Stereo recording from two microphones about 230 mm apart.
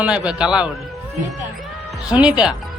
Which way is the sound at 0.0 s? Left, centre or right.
Centre.